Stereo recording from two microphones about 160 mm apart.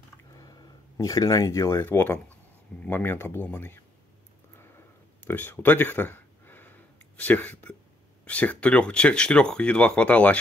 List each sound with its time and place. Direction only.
0.3 s speech: 25° left (ahead or behind)
4.6 s a sound: 15° left (ahead or behind)
8.3 s speech: 10° left (ahead or behind)